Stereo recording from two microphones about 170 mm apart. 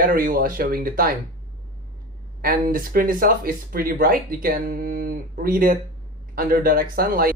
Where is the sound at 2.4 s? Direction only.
55° right (ahead or behind).